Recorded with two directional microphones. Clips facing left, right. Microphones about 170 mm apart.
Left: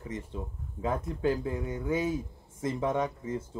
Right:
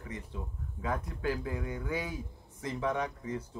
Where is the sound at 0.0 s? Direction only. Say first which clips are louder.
Left 4 dB; 25° left (ahead or behind).